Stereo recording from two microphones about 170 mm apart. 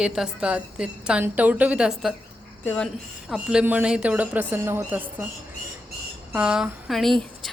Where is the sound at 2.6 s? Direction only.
10° left (ahead or behind).